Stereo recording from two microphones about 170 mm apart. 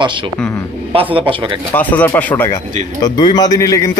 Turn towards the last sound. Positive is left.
turn(degrees=20)  # may be behind; listen again after turning